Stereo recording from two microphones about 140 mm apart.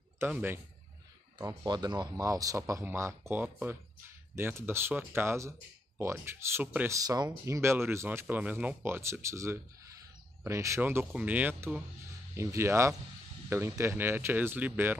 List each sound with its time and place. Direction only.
0.3 s speech: 15° right (ahead or behind)
1.4 s a man's voice: 25° right (ahead or behind)
7.0 s a man's voice: 25° right (ahead or behind)